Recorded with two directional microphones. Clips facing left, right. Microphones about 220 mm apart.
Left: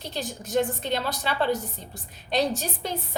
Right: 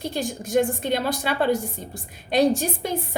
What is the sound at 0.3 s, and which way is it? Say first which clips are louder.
A woman's voice: right 3 dB; 15° right (ahead or behind).